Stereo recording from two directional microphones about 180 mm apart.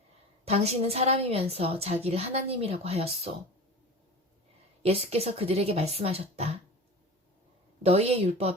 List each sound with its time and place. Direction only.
0.4 s speech: 35° right (ahead or behind)
4.8 s speech: 35° right (ahead or behind)
7.8 s speech: 35° right (ahead or behind)